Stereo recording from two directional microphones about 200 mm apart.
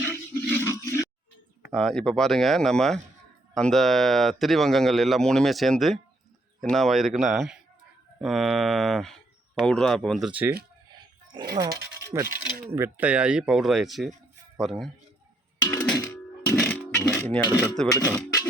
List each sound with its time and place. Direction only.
0.4 s a sound: 10° left (ahead or behind)
1.7 s speech: centre (ahead or behind)
11.5 s speech: 20° right (ahead or behind); by 14.8 s centre (ahead or behind)
16.0 s music: 15° left (ahead or behind)
16.6 s a sound: 5° left (ahead or behind)
17.9 s speech: 15° left (ahead or behind)